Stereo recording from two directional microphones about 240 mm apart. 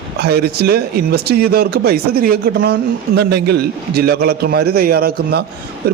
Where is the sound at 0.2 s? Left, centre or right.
Right.